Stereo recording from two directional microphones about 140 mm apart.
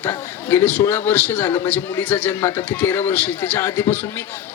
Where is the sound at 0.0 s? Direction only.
15° left (ahead or behind).